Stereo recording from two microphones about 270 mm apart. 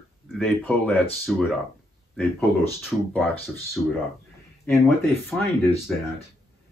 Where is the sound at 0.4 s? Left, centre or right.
Centre.